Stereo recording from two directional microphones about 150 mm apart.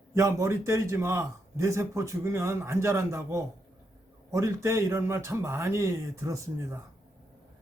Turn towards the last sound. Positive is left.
turn(degrees=-20)  # may be behind; listen again after turning